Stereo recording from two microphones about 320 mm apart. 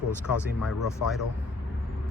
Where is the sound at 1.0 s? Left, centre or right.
Left.